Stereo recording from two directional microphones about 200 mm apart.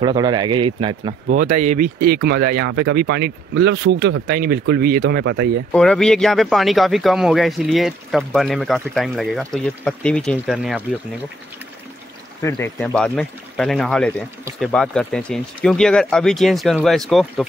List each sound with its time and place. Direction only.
0.0 s speech: 20° right (ahead or behind)
1.2 s speech: 40° right (ahead or behind); by 5.5 s 60° right (ahead or behind)
5.7 s speech: 5° left (ahead or behind)
12.8 s speech: 5° left (ahead or behind)